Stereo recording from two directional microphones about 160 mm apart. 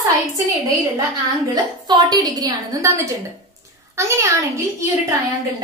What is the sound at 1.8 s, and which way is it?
A woman's voice, 25° right (ahead or behind).